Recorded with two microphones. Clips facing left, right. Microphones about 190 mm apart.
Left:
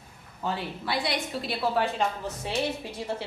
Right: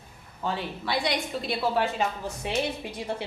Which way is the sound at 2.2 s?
15° right (ahead or behind).